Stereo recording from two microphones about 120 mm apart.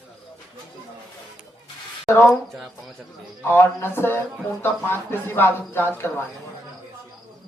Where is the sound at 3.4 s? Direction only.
15° left (ahead or behind).